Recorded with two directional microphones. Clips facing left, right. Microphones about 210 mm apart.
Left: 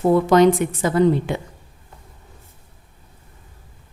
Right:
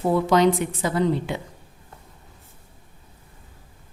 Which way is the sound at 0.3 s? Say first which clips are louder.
Left 4 dB; 50° left (ahead or behind).